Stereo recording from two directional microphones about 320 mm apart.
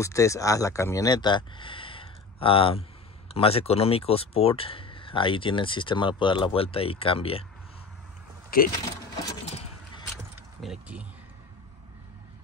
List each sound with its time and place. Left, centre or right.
0.0 s speech: centre
8.7 s vehicle: centre
10.6 s speech: centre